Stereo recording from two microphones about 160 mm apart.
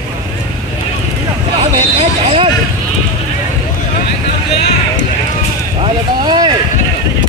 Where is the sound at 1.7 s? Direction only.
35° right (ahead or behind).